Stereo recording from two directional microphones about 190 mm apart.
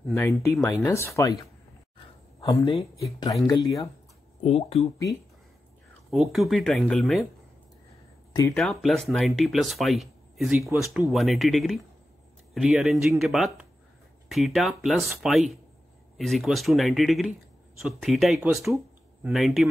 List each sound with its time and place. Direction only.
0.1 s speech: 15° left (ahead or behind)
2.4 s speech: 15° left (ahead or behind)
4.4 s speech: 35° left (ahead or behind)
6.0 s speech: centre (ahead or behind)
8.5 s speech: centre (ahead or behind)
10.6 s speech: 15° right (ahead or behind)
10.9 s speech: centre (ahead or behind)